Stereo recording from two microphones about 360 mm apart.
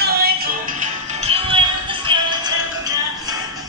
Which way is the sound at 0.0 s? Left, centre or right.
Right.